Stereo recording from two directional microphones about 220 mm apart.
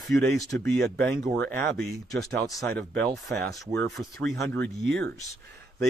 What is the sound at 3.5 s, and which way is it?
Speech, 15° left (ahead or behind).